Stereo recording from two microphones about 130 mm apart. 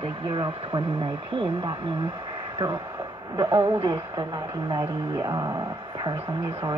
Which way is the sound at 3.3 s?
30° right (ahead or behind).